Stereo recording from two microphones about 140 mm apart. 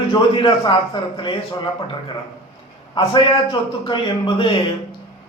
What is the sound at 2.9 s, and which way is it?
A man's voice, 35° left (ahead or behind).